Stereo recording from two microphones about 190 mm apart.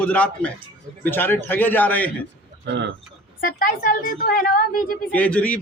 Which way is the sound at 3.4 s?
50° left (ahead or behind).